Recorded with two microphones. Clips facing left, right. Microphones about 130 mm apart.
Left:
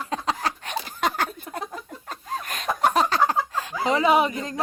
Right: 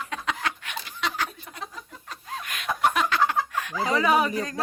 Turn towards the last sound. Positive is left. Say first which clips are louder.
# left 2 dB
turn(degrees=25)  # may be behind; listen again after turning